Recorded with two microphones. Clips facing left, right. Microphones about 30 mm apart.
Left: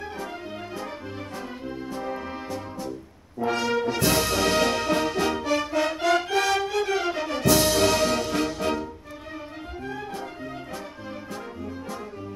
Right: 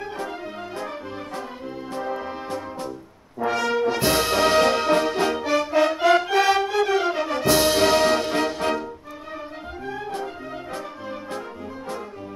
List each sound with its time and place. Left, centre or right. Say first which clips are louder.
2.0 s music: right 6 dB; centre
3.4 s brass instrument: right 3 dB; centre
5.7 s music: right 7 dB; centre